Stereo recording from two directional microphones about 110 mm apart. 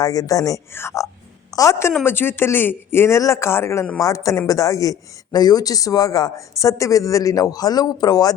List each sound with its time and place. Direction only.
0.0 s speech: 35° left (ahead or behind)